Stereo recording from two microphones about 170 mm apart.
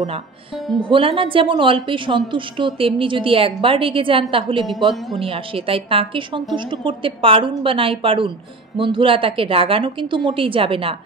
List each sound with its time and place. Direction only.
0.7 s a woman's voice: 30° right (ahead or behind)